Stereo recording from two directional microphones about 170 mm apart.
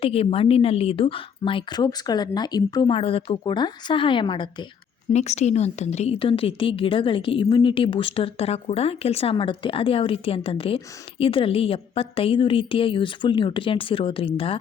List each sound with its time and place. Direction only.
0.0 s a woman's voice: 35° left (ahead or behind)
5.1 s a woman's voice: 40° left (ahead or behind)